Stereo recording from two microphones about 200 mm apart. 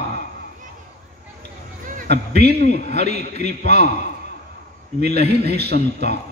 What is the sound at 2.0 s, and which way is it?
A man's voice, 50° right (ahead or behind).